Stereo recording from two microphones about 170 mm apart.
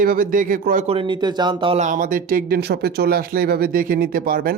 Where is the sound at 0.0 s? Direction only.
55° right (ahead or behind).